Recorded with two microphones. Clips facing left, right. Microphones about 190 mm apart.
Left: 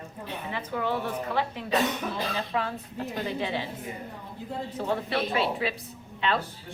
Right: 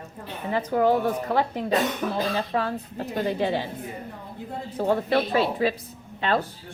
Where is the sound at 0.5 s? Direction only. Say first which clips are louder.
Right 9 dB; 40° right (ahead or behind).